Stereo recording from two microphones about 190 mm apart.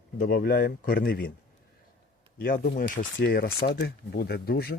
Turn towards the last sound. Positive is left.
turn(degrees=55)  # may be behind; listen again after turning